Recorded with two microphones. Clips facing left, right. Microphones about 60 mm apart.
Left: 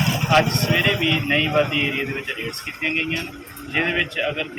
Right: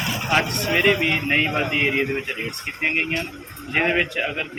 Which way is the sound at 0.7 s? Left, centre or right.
Right.